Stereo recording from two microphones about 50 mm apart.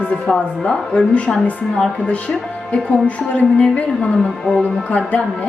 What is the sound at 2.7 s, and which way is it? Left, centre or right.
A woman's voice, left.